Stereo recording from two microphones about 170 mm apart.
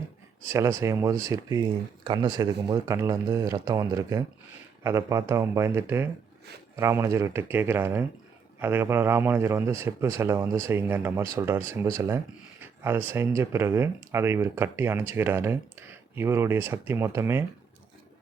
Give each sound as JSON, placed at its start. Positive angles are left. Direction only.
{"t": 0.4, "sound": "speech", "side_deg": -15}